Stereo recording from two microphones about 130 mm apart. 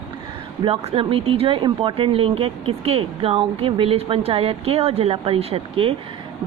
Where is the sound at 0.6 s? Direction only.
45° right (ahead or behind).